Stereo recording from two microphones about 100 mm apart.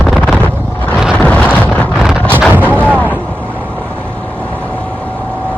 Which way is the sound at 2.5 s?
20° right (ahead or behind).